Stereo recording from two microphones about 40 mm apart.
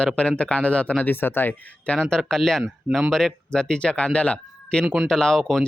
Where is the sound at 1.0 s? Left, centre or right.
Left.